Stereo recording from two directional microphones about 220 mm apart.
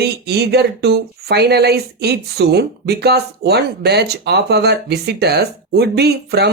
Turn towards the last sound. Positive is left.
turn(degrees=-50)  # may be behind; listen again after turning